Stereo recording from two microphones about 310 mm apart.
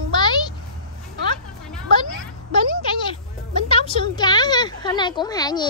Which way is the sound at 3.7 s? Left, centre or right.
Centre.